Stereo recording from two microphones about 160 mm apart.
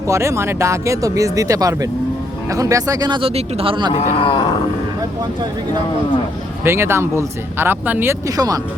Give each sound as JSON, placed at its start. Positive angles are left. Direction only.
{"t": 0.1, "sound": "speech", "side_deg": -15}
{"t": 3.9, "sound": "speech", "side_deg": 35}
{"t": 6.7, "sound": "speech", "side_deg": -15}